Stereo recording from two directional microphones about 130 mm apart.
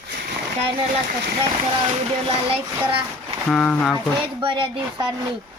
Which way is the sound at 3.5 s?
10° left (ahead or behind).